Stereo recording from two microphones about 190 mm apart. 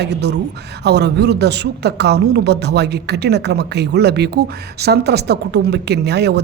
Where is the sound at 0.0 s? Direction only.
60° right (ahead or behind).